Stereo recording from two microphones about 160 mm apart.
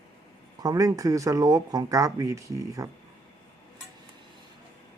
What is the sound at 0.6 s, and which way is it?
Speech, 20° right (ahead or behind).